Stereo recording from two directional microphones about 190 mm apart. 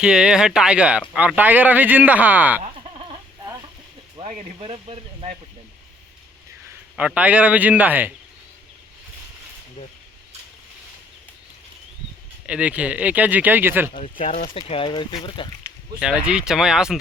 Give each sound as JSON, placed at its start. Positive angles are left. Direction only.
{"t": 0.0, "sound": "speech", "side_deg": -5}
{"t": 4.2, "sound": "speech", "side_deg": -35}
{"t": 6.9, "sound": "speech", "side_deg": -5}
{"t": 12.5, "sound": "speech", "side_deg": -5}
{"t": 13.9, "sound": "speech", "side_deg": 40}
{"t": 16.0, "sound": "speech", "side_deg": -5}